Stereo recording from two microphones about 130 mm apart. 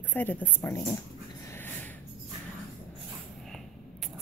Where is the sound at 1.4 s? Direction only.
15° left (ahead or behind).